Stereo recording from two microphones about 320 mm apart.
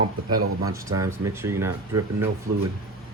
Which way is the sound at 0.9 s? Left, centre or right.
Centre.